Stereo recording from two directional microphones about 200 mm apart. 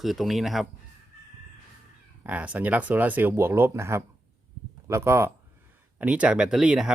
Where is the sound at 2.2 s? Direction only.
10° right (ahead or behind).